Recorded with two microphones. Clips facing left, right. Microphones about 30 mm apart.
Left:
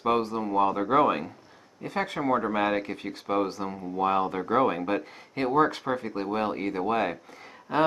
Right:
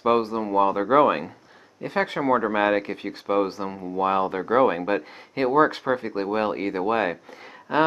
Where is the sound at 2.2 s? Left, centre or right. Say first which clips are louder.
Right 4 dB; centre.